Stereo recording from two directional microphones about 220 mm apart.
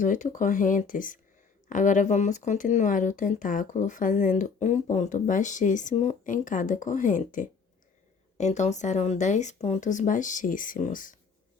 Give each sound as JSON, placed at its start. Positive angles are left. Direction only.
{"t": 0.0, "sound": "speech", "side_deg": 35}